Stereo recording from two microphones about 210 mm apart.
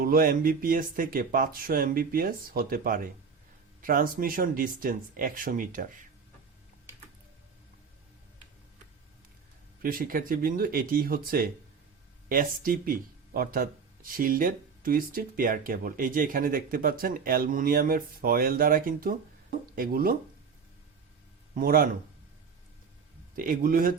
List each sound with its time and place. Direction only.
0.0 s speech: 45° right (ahead or behind)
9.8 s speech: 40° right (ahead or behind)
21.5 s speech: 45° right (ahead or behind)
23.3 s speech: 40° right (ahead or behind)